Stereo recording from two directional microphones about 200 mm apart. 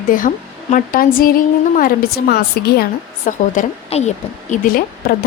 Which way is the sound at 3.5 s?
35° left (ahead or behind).